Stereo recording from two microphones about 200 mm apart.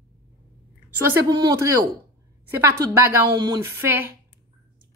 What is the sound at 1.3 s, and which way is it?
A woman's voice, 20° right (ahead or behind).